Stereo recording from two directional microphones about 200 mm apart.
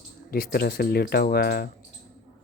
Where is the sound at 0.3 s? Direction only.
50° left (ahead or behind).